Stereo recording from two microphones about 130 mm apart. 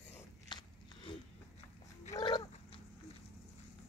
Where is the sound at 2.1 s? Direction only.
35° left (ahead or behind).